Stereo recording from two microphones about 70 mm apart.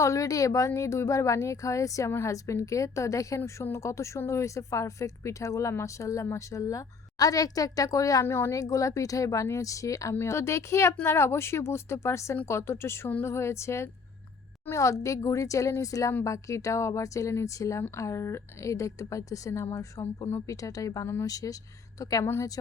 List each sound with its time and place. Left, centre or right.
0.0 s a woman's voice: left
8.2 s speech: left
8.5 s speech: left
10.2 s speech: left
20.5 s a woman's voice: left